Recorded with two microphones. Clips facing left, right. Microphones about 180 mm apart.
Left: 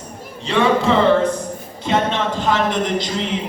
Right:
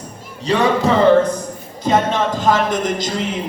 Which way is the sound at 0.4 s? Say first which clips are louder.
Right 1 dB; 40° right (ahead or behind).